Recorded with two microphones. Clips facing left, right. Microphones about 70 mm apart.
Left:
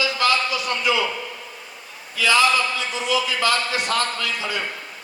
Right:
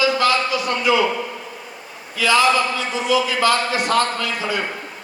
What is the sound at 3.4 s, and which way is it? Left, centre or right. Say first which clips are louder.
Speech: right 4 dB; right.